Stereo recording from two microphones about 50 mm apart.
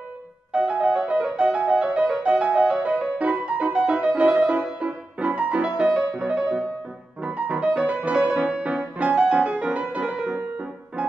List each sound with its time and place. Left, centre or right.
0.5 s music: right